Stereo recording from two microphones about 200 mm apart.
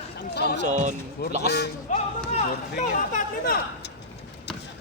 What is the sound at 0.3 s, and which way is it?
Speech, 55° left (ahead or behind).